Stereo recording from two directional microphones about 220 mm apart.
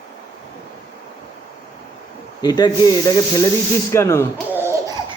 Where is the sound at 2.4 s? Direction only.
20° left (ahead or behind).